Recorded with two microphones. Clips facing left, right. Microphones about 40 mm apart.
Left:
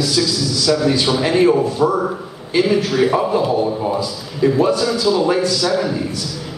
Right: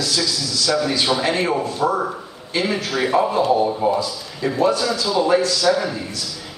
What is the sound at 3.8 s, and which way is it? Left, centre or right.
A man's voice, centre.